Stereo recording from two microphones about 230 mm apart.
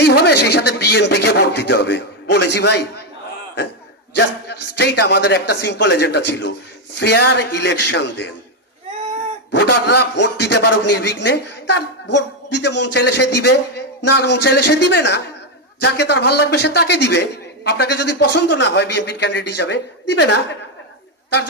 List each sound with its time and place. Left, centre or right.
0.0 s speech: left
4.1 s a man's voice: left
9.5 s a man's voice: left